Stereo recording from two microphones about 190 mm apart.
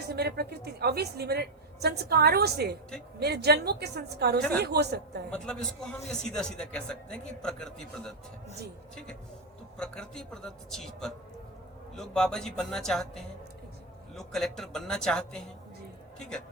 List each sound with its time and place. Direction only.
0.1 s a woman's voice: 55° right (ahead or behind)
5.3 s a man's voice: 5° left (ahead or behind)
9.7 s a man's voice: 5° left (ahead or behind)